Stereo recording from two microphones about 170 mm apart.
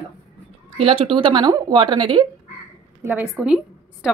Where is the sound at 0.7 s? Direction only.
35° right (ahead or behind).